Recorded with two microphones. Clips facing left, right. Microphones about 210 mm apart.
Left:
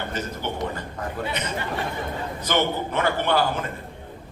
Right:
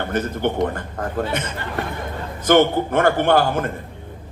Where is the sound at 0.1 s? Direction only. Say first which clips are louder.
Right 8 dB; 55° right (ahead or behind).